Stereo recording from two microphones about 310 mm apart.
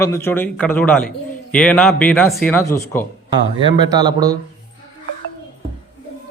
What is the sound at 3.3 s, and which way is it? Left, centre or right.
Speech, centre.